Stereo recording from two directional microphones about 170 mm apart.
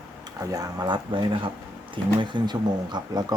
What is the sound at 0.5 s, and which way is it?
Speech, 20° right (ahead or behind).